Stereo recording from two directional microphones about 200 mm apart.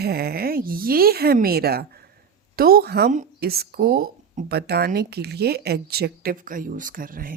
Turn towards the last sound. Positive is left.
turn(degrees=-45)  # may be behind; listen again after turning